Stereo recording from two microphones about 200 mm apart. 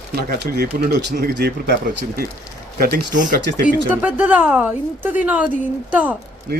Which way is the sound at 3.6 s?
10° right (ahead or behind).